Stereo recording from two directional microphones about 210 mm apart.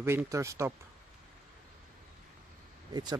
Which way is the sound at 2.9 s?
20° right (ahead or behind).